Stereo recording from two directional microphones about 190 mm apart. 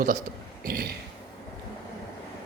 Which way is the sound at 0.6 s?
55° right (ahead or behind).